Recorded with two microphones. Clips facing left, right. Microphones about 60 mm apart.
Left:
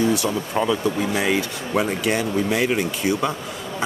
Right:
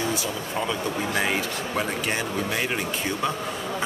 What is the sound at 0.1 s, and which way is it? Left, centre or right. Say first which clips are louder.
Speech: left 6 dB; left.